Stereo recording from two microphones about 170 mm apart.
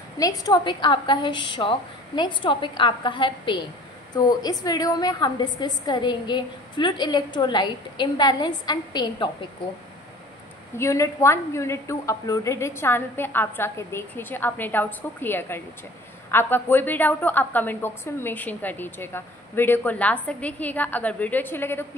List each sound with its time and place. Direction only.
0.2 s a woman's voice: 20° left (ahead or behind)
10.8 s a woman's voice: 15° left (ahead or behind)